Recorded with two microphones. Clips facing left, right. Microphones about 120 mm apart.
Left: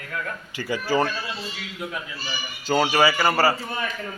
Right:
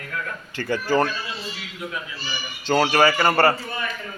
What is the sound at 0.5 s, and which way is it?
Speech, 10° left (ahead or behind).